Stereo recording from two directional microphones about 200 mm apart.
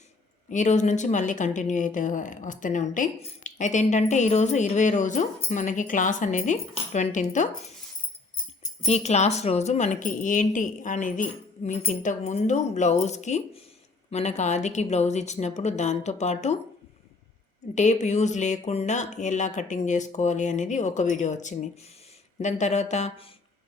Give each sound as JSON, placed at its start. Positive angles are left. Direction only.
{"t": 0.5, "sound": "speech", "side_deg": 35}
{"t": 8.9, "sound": "speech", "side_deg": 35}
{"t": 17.7, "sound": "speech", "side_deg": 35}